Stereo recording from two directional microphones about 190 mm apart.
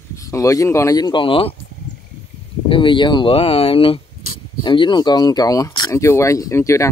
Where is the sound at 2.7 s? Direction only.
25° left (ahead or behind).